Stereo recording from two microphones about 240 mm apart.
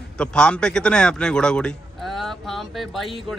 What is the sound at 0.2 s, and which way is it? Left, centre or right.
A man's voice, centre.